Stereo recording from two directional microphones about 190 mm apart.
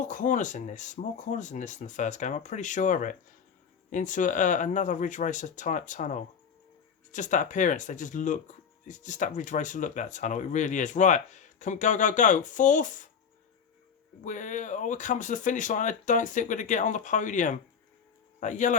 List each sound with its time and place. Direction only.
0.0 s speech: 40° left (ahead or behind)
14.3 s speech: 40° left (ahead or behind)